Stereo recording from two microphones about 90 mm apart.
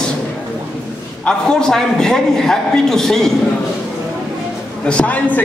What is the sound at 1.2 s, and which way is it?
A man's voice, 10° left (ahead or behind).